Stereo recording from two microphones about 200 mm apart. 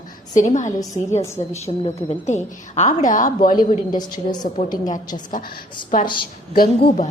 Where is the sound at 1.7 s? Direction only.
30° left (ahead or behind).